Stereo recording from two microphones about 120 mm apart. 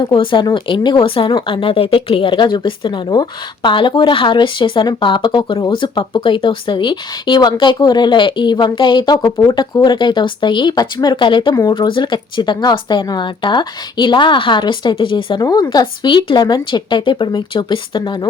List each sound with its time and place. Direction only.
0.0 s speech: 45° left (ahead or behind)